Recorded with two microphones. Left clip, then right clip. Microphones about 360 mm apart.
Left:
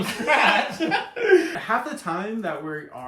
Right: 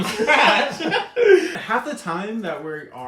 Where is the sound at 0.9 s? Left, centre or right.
Centre.